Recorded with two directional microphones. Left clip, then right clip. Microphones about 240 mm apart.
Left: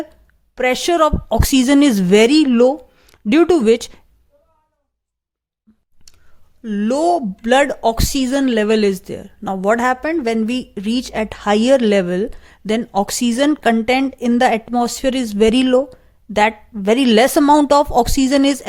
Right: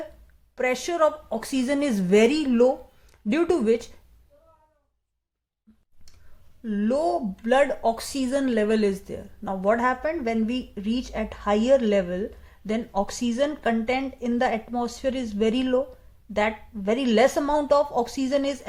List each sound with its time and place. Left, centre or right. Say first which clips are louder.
0.5 s a woman's voice: left 9 dB; left
6.1 s clicking: left 9 dB; left
6.6 s speech: left 7 dB; left